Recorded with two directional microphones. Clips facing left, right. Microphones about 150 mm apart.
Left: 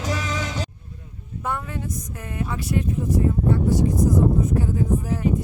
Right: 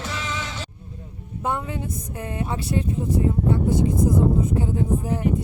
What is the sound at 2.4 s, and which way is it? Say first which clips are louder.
Speech: left 1 dB; 30° right (ahead or behind).